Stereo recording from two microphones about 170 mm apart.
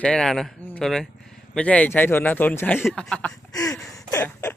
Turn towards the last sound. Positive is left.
turn(degrees=20)  # may be behind; listen again after turning